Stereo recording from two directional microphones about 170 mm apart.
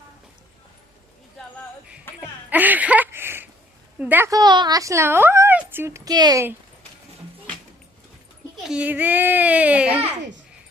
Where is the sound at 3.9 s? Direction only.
10° right (ahead or behind).